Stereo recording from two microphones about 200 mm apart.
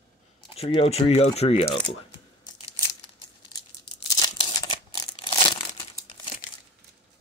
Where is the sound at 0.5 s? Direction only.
30° left (ahead or behind).